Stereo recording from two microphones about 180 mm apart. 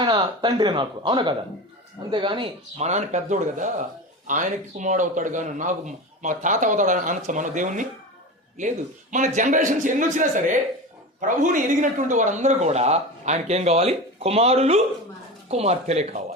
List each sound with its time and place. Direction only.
0.0 s a man's voice: 25° right (ahead or behind)